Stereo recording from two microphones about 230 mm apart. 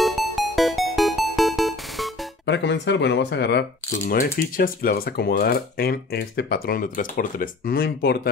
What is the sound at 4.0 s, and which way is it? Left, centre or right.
Speech, left.